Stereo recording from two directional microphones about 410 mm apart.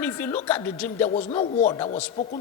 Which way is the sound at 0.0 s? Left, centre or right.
Centre.